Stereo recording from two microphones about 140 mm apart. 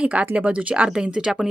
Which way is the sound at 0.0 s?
10° right (ahead or behind).